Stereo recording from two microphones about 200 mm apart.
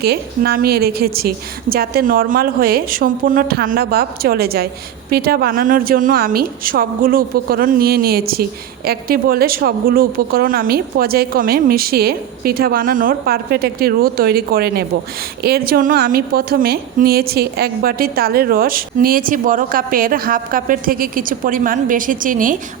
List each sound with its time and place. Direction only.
0.0 s a woman's voice: 50° right (ahead or behind)